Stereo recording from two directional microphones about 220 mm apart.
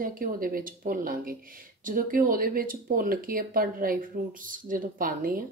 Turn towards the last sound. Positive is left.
turn(degrees=-40)  # may be behind; listen again after turning